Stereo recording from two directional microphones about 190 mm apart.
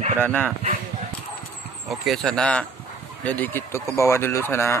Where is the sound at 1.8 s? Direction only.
Centre (ahead or behind).